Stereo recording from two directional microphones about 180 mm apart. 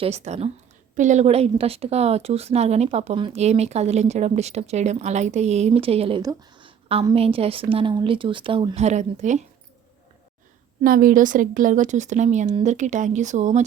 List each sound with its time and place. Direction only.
0.0 s a woman's voice: 40° right (ahead or behind)
10.8 s a woman's voice: 50° right (ahead or behind)